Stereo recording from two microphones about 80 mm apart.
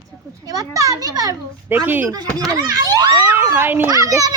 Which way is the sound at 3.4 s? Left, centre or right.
Right.